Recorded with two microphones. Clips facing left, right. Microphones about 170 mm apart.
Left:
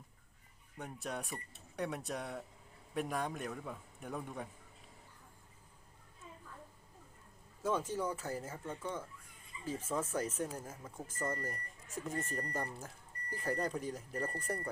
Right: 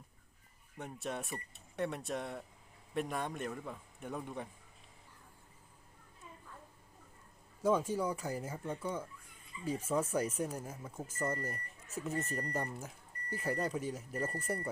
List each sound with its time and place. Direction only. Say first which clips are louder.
0.8 s speech: right 1 dB; centre (ahead or behind)
7.6 s speech: right 4 dB; 10° right (ahead or behind)